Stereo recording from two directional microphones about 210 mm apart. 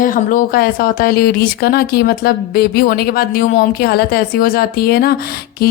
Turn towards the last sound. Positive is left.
turn(degrees=45)  # may be behind; listen again after turning